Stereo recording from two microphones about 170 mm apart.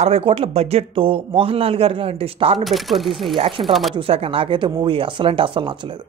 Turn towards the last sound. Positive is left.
turn(degrees=-30)  # may be behind; listen again after turning